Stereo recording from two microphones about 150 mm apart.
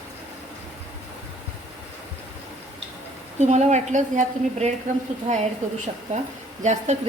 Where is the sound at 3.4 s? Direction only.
50° right (ahead or behind).